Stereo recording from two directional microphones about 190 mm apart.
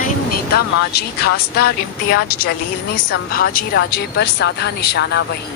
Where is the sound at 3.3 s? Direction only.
50° left (ahead or behind).